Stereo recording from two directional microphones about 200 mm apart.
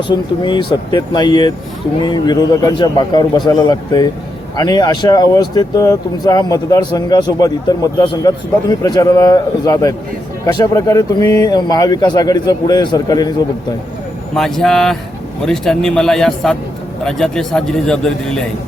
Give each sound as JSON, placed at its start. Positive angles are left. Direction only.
{"t": 0.1, "sound": "speech", "side_deg": 20}
{"t": 14.3, "sound": "a man's voice", "side_deg": 0}